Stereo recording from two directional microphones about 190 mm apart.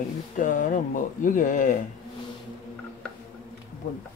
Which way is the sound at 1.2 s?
45° left (ahead or behind).